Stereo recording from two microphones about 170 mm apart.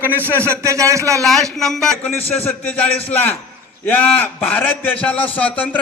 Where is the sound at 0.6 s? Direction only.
20° right (ahead or behind).